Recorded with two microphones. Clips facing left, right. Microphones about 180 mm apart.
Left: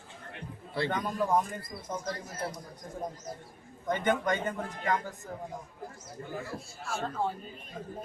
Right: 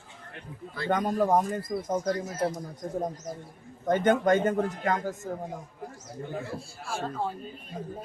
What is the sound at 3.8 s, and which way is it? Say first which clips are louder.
Speech: right 6 dB; 45° right (ahead or behind).